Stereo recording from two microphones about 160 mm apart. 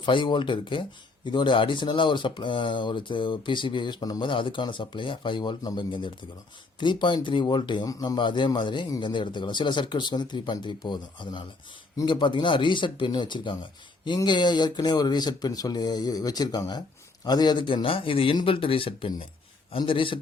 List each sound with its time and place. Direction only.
0.0 s speech: 30° left (ahead or behind)